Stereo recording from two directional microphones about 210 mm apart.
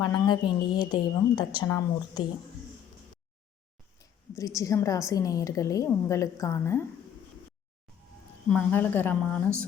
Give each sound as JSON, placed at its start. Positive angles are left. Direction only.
{"t": 0.0, "sound": "a woman's voice", "side_deg": 20}
{"t": 4.4, "sound": "a woman's voice", "side_deg": 15}
{"t": 8.4, "sound": "a woman's voice", "side_deg": 5}